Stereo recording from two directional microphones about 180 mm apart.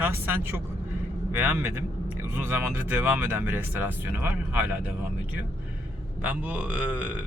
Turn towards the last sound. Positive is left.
turn(degrees=-10)  # may be behind; listen again after turning